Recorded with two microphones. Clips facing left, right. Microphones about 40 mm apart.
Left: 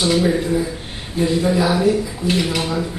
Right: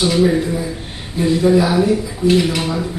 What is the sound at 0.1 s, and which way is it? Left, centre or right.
Speech, centre.